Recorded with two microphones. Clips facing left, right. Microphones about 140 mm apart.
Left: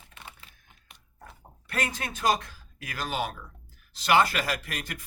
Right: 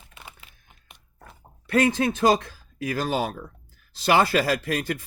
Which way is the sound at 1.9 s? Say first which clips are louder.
Right 7 dB; 30° right (ahead or behind).